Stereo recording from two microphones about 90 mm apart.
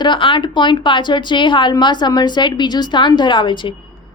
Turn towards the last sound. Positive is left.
turn(degrees=65)  # may be behind; listen again after turning